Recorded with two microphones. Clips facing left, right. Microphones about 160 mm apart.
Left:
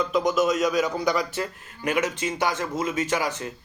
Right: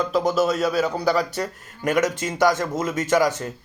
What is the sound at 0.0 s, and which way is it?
Speech, 35° right (ahead or behind).